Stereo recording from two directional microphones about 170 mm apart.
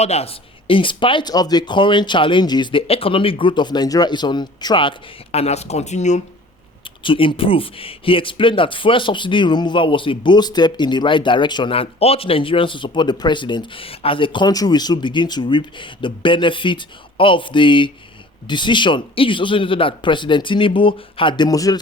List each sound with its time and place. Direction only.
0.0 s speech: 40° left (ahead or behind)
7.0 s speech: 30° left (ahead or behind)